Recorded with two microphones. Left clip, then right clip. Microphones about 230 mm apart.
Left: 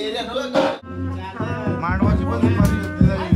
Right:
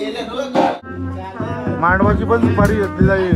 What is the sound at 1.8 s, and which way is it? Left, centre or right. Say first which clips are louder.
Speech: right 11 dB; right.